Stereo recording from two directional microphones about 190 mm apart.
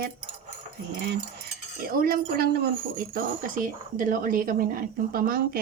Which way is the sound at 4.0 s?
45° right (ahead or behind).